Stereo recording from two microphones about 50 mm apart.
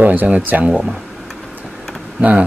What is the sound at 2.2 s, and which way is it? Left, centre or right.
Speech, right.